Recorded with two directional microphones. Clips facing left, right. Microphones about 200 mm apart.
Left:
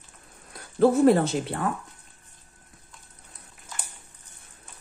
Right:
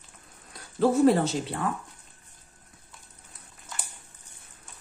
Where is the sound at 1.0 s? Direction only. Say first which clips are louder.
Left 2 dB; 55° left (ahead or behind).